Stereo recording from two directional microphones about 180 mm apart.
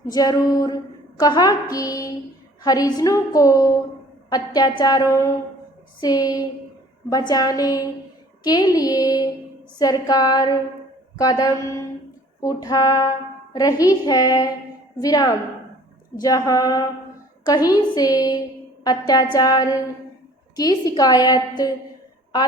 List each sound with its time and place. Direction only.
0.1 s music: 20° left (ahead or behind)
11.2 s a sound: 20° left (ahead or behind)
12.4 s music: 20° left (ahead or behind)